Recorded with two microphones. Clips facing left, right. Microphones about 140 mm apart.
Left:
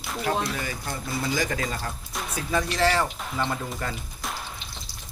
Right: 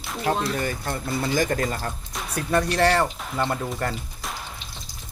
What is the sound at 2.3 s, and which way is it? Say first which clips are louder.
Speech: right 4 dB; 60° right (ahead or behind).